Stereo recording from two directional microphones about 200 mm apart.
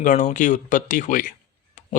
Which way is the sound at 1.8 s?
40° left (ahead or behind).